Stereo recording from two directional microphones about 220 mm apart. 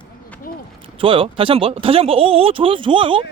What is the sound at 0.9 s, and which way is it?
Speech, 25° right (ahead or behind).